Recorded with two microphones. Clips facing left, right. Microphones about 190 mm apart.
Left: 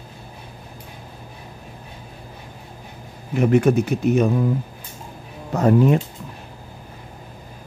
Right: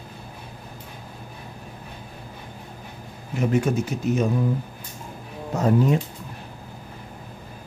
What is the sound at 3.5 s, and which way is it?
Speech, 65° left (ahead or behind).